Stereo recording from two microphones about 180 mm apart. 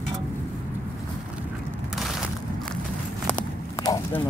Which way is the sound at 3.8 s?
20° left (ahead or behind).